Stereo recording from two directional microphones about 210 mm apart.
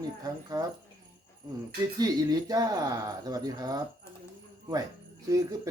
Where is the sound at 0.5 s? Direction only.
20° right (ahead or behind).